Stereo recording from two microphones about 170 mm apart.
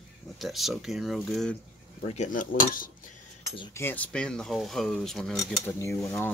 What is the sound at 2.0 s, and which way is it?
Cutlery, 45° left (ahead or behind).